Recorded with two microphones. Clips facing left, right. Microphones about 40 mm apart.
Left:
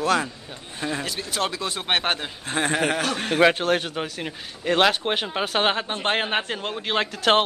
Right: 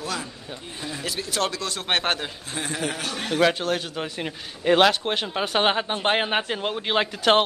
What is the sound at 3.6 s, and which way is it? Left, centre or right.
Speech, left.